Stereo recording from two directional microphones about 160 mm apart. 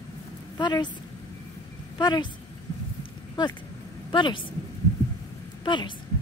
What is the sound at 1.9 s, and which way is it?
Speech, 25° left (ahead or behind).